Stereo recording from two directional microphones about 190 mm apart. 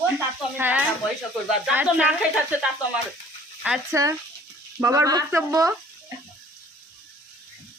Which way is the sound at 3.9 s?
15° right (ahead or behind).